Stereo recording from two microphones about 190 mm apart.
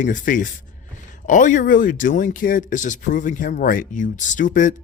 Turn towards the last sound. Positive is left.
turn(degrees=40)  # may be behind; listen again after turning